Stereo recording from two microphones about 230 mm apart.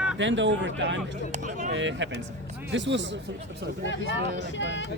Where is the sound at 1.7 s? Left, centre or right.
Right.